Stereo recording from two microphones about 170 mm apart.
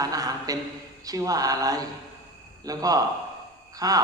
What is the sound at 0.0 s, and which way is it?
A man's voice, 20° right (ahead or behind).